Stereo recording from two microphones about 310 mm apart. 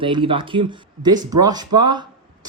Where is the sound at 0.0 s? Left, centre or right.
Centre.